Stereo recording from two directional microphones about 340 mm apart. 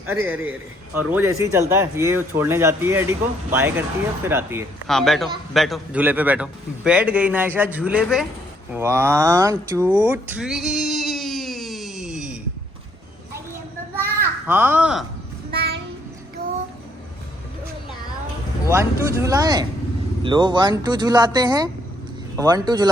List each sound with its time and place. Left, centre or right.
0.0 s a man's voice: centre
14.4 s a man's voice: centre
15.5 s child singing: right
18.7 s speech: centre